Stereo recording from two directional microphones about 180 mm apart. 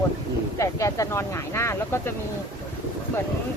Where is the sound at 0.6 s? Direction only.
15° left (ahead or behind).